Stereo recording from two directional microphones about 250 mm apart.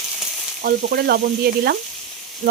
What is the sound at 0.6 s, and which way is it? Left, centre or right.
Speech, right.